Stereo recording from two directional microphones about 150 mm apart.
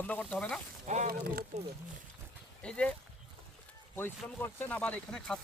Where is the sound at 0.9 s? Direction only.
50° right (ahead or behind).